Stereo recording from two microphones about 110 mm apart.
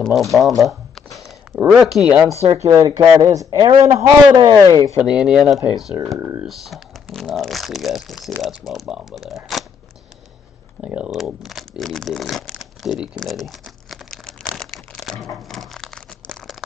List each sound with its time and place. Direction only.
0.0 s speech: centre (ahead or behind)
0.6 s shuffling cards: centre (ahead or behind)
1.7 s speech: centre (ahead or behind)
2.5 s a man's voice: 30° right (ahead or behind)
5.0 s speech: 10° right (ahead or behind)
10.8 s speech: 10° right (ahead or behind)
13.2 s crumpling: centre (ahead or behind)